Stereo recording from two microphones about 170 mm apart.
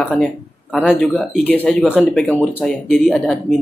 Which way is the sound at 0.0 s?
5° left (ahead or behind).